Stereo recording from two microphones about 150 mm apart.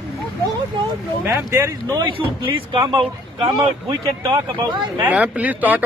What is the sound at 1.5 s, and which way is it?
Speech, 20° right (ahead or behind).